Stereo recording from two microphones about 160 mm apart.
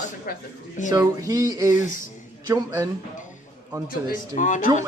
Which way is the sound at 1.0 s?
20° right (ahead or behind).